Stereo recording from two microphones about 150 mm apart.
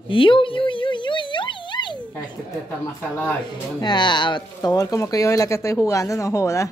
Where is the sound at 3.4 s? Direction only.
30° left (ahead or behind).